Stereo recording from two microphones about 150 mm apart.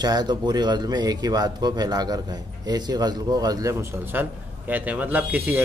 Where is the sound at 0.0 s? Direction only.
30° right (ahead or behind).